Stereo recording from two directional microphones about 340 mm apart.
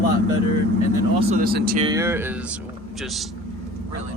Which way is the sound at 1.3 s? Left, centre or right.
Right.